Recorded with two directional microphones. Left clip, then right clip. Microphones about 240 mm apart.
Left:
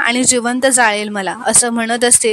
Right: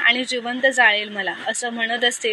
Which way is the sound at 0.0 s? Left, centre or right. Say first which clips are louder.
Left 4 dB; left.